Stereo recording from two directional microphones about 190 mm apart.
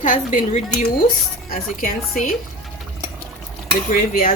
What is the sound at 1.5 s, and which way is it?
Speech, 45° left (ahead or behind).